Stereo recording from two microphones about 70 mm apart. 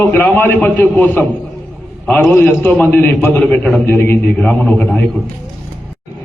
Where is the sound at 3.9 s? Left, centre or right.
Left.